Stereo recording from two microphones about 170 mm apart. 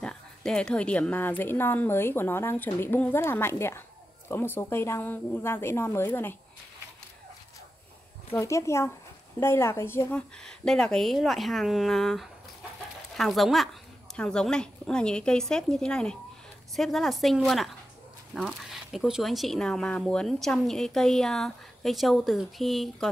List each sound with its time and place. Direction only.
0.0 s a woman's voice: 5° left (ahead or behind)
8.3 s a woman's voice: 15° left (ahead or behind)
10.4 s speech: 5° left (ahead or behind)